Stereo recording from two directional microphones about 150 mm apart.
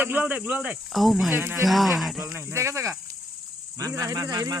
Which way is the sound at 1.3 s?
15° right (ahead or behind).